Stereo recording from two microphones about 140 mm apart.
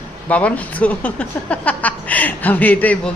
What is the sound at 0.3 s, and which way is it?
Speech, 10° left (ahead or behind).